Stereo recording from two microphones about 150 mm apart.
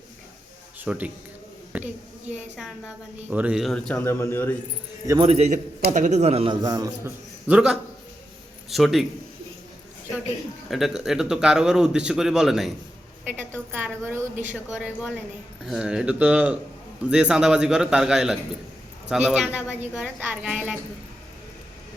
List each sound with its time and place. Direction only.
0.9 s a woman's voice: 10° right (ahead or behind)
4.0 s a man's voice: 15° left (ahead or behind)
5.0 s a man's voice: 30° right (ahead or behind)
5.3 s a man's voice: 45° right (ahead or behind); by 6.9 s 30° right (ahead or behind)
7.0 s a man's voice: 10° right (ahead or behind)
10.7 s a woman's voice: centre (ahead or behind)